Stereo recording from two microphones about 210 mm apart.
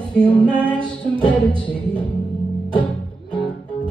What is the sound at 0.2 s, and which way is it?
Music, 25° right (ahead or behind).